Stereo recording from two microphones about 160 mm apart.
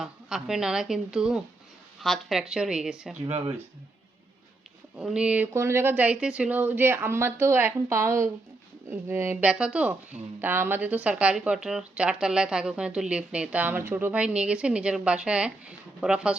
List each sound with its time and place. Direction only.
0.0 s a woman's voice: 5° right (ahead or behind)
3.2 s speech: 40° right (ahead or behind)
4.9 s speech: 5° right (ahead or behind)